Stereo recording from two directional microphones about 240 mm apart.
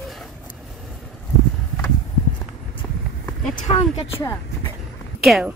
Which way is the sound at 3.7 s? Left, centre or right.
Centre.